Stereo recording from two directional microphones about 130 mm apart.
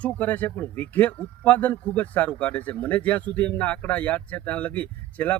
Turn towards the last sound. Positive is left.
turn(degrees=10)  # may be behind; listen again after turning